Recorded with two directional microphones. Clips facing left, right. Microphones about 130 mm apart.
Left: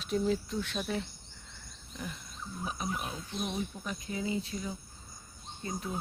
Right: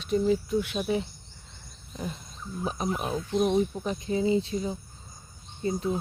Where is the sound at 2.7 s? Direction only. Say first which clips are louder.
Right 8 dB; 35° right (ahead or behind).